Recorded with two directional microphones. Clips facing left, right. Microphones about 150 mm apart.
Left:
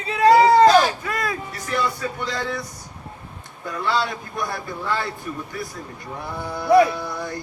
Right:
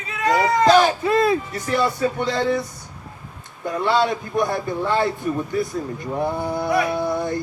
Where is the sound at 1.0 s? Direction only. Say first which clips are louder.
Right 9 dB; 25° right (ahead or behind).